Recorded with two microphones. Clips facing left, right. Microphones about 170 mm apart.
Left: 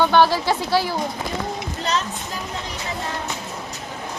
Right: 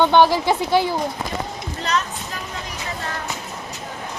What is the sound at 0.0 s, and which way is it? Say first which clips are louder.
Speech: right 2 dB; 20° right (ahead or behind).